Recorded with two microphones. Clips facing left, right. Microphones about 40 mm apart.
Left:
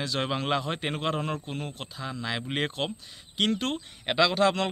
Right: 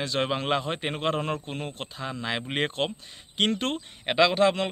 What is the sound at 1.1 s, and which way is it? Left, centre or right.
Speech, right.